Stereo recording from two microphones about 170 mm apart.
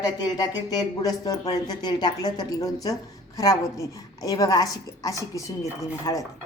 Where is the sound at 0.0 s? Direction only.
25° left (ahead or behind).